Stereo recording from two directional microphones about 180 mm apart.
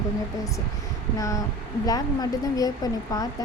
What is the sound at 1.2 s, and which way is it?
Speech, 20° left (ahead or behind).